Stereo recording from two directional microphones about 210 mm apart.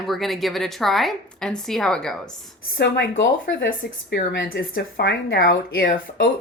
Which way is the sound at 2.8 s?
55° left (ahead or behind).